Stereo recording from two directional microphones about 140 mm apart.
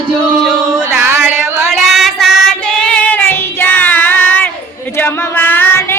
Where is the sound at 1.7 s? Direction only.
Centre (ahead or behind).